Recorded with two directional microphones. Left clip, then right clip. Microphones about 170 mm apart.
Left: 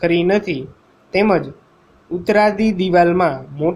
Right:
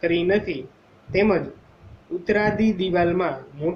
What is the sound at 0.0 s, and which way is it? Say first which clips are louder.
A man's voice: left 5 dB; 65° left (ahead or behind).